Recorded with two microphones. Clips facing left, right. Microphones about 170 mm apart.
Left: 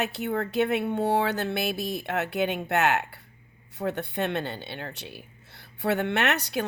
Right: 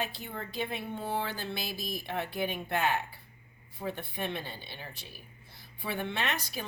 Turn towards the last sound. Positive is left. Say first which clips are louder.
# left 8 dB
turn(degrees=75)  # may be behind; listen again after turning